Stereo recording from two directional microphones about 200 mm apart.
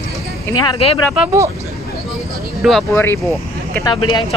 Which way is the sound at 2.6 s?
Centre (ahead or behind).